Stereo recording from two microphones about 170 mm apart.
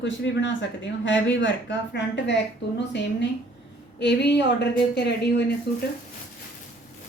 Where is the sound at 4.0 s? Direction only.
90° left.